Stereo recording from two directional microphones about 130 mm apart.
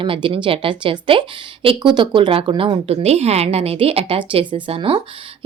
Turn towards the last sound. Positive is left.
turn(degrees=-40)  # may be behind; listen again after turning